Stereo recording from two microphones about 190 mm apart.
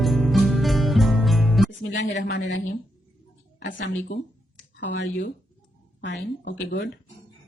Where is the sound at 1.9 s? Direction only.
65° left (ahead or behind).